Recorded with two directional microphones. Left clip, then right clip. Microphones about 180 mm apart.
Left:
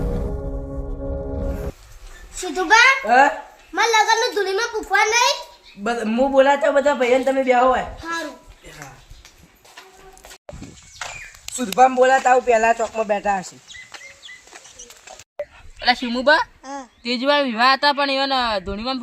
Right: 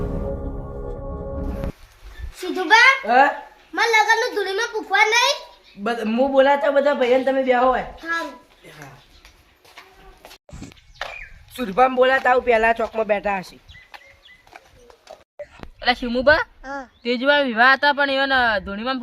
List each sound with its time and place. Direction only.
2.4 s a child's voice: 15° left (ahead or behind)
3.1 s a man's voice: 10° right (ahead or behind)
3.8 s a child's voice: 15° left (ahead or behind)
5.8 s a man's voice: 15° right (ahead or behind)
8.0 s a child's voice: 10° left (ahead or behind)
10.5 s horse: centre (ahead or behind)
11.5 s speech: centre (ahead or behind)
12.5 s speech: 30° right (ahead or behind)
12.8 s a man's voice: 15° right (ahead or behind)
13.2 s speech: 30° right (ahead or behind)
15.4 s a sound: centre (ahead or behind)
15.9 s a man's voice: 10° right (ahead or behind)
16.6 s a child's voice: 10° left (ahead or behind)
17.1 s a man's voice: 15° right (ahead or behind)